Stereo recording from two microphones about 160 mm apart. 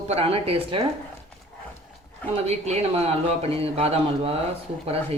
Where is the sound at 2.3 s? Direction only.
40° right (ahead or behind).